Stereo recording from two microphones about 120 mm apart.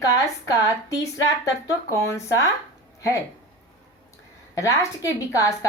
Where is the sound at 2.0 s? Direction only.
25° left (ahead or behind).